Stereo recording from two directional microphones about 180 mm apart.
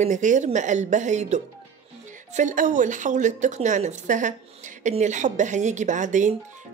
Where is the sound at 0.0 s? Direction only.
45° right (ahead or behind).